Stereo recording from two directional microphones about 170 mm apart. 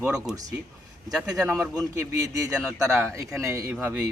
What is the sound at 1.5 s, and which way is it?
Speech, 5° right (ahead or behind).